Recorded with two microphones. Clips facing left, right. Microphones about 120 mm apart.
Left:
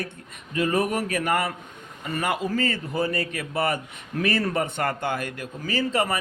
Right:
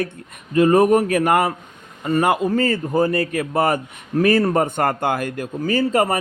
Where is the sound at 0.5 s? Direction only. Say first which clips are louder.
Right 10 dB; 45° right (ahead or behind).